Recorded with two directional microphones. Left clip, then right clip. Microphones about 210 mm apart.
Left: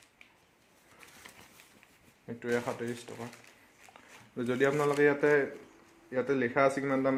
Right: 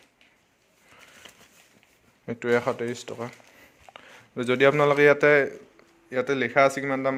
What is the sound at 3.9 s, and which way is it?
A man's voice, 40° right (ahead or behind).